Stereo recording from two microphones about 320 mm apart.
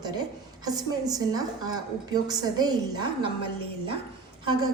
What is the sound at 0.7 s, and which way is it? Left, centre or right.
A woman's voice, centre.